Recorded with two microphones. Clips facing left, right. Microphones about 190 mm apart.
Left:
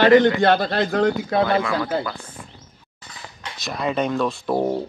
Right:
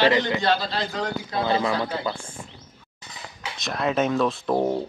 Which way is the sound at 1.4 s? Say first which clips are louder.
Left 2 dB; 25° right (ahead or behind).